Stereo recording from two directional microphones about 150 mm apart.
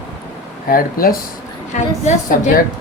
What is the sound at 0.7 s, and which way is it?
Speech, 75° left (ahead or behind).